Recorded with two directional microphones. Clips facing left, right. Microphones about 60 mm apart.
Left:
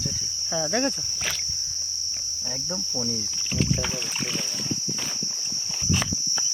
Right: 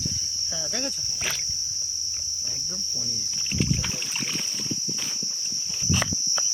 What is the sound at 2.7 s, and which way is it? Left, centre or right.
Cricket, left.